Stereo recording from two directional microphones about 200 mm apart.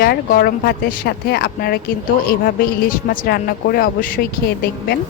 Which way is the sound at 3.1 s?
50° left (ahead or behind).